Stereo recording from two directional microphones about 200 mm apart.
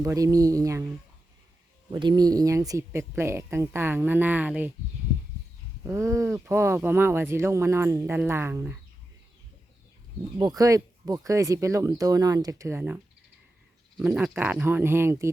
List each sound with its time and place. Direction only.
0.0 s speech: 15° right (ahead or behind)
1.9 s speech: 20° right (ahead or behind)
5.8 s speech: 15° right (ahead or behind)
10.3 s speech: 20° right (ahead or behind)
14.0 s speech: 5° right (ahead or behind)